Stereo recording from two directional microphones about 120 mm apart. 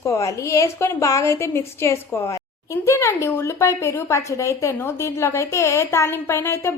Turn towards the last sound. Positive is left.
turn(degrees=20)  # may be behind; listen again after turning